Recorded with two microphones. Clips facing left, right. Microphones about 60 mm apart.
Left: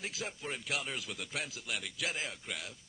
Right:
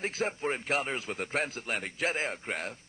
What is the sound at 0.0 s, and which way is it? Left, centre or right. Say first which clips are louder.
Speech: right 9 dB; right.